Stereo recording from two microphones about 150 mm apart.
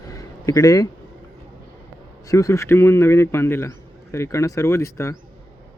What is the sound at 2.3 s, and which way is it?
A man's voice, 20° left (ahead or behind).